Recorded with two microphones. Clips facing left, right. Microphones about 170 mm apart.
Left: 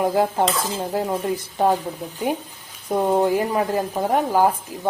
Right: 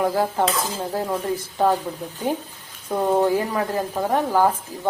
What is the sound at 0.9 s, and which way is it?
Speech, 15° left (ahead or behind).